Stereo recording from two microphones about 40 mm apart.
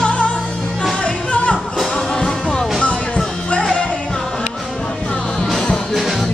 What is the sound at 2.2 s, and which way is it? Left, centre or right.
Music, centre.